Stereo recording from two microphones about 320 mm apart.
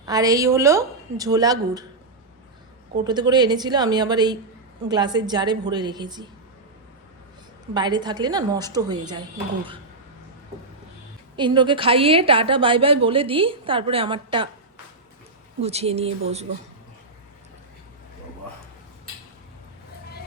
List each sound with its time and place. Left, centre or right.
0.0 s a woman's voice: centre
3.0 s a woman's voice: centre
7.7 s a woman's voice: centre
11.3 s a woman's voice: centre
15.6 s speech: centre